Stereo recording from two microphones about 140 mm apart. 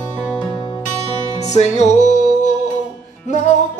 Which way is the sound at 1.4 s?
55° left (ahead or behind).